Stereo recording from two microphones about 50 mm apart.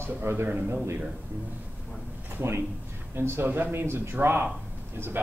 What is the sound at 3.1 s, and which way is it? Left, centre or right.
A man's voice, right.